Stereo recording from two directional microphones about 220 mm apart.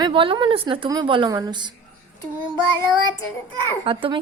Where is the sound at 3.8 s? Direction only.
25° right (ahead or behind).